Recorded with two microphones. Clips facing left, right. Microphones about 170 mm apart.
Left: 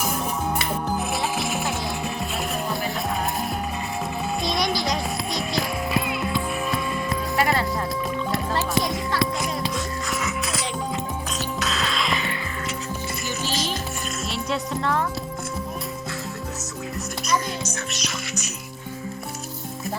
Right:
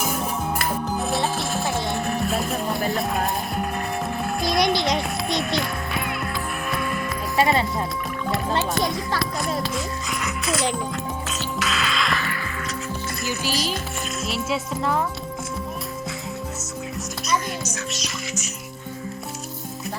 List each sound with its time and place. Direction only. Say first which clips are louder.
1.1 s music: right 2 dB; centre (ahead or behind)
4.4 s music: right 4 dB; centre (ahead or behind)
4.6 s music: right 5 dB; 25° right (ahead or behind)
4.9 s a sound: right 2 dB; centre (ahead or behind)
7.3 s music: right 3 dB; 25° right (ahead or behind)
8.3 s music: right 3 dB; centre (ahead or behind)
12.2 s music: even; 25° left (ahead or behind)
14.3 s music: right 1 dB; centre (ahead or behind)
17.9 s music: even; centre (ahead or behind)